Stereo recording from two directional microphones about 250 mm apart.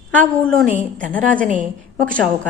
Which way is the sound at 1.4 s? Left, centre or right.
Right.